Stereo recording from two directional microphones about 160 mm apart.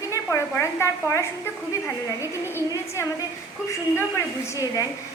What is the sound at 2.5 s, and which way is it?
A woman's voice, 15° left (ahead or behind).